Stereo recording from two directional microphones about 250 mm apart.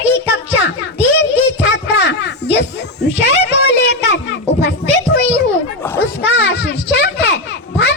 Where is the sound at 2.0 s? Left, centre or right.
Left.